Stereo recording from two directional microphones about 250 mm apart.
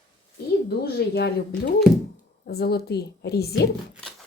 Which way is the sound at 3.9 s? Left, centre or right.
Centre.